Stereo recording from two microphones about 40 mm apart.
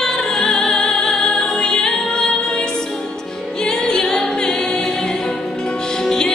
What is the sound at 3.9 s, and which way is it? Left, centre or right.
A capella, centre.